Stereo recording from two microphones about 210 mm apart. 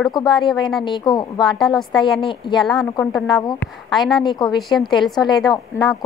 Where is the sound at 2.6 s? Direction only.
Centre (ahead or behind).